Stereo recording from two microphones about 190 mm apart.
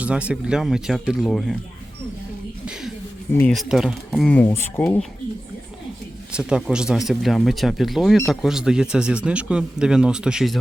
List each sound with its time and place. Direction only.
0.0 s speech: 5° right (ahead or behind)
3.3 s speech: 5° left (ahead or behind)
4.3 s speech: 10° left (ahead or behind)
6.3 s speech: 5° right (ahead or behind)